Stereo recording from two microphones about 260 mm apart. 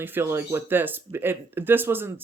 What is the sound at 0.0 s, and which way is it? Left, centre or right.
Speech, centre.